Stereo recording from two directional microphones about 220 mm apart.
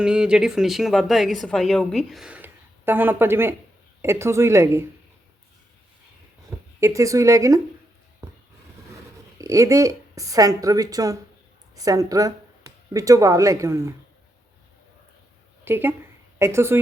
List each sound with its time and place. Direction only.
0.0 s speech: 5° right (ahead or behind)
6.7 s speech: 15° right (ahead or behind)
9.4 s speech: 15° right (ahead or behind)
15.6 s speech: 10° right (ahead or behind)